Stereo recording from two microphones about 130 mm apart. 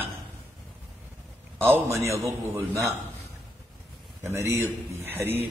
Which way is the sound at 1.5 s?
15° right (ahead or behind).